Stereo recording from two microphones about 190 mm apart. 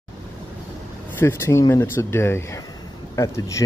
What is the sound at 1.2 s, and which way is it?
Speech, 15° left (ahead or behind).